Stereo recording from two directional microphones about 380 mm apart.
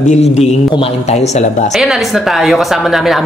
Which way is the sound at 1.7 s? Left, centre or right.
Centre.